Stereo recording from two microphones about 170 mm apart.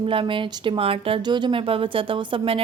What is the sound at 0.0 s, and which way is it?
A woman's voice, 30° right (ahead or behind).